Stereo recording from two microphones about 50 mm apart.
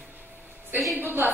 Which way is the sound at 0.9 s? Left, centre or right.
Right.